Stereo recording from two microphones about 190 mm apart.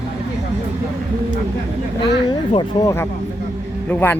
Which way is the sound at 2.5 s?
25° left (ahead or behind).